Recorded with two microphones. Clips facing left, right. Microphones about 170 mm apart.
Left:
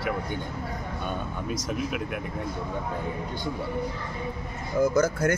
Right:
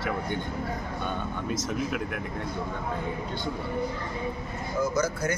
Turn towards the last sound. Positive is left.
turn(degrees=55)  # may be behind; listen again after turning